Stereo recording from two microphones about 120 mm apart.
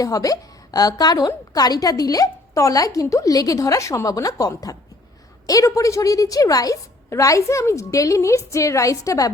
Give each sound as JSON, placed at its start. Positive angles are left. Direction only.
{"t": 0.0, "sound": "a woman's voice", "side_deg": 30}